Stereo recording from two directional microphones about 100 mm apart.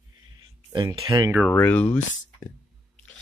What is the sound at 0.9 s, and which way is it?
Speech, 35° right (ahead or behind).